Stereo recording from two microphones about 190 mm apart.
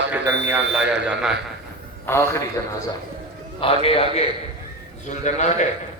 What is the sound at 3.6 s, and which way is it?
A man's voice, 30° left (ahead or behind).